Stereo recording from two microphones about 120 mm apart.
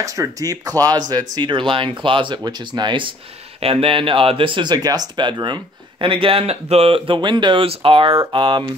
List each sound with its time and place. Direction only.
0.0 s speech: 25° right (ahead or behind)
3.6 s speech: 50° right (ahead or behind)